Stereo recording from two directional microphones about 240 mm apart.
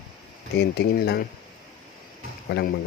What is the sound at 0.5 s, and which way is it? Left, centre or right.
Speech, left.